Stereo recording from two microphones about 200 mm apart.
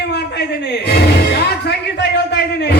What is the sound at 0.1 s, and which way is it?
Chuckle, 55° left (ahead or behind).